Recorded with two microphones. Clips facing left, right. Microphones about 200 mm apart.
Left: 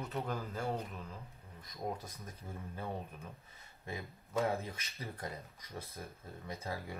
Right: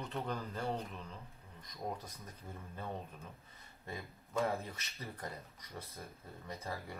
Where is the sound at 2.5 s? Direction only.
10° left (ahead or behind).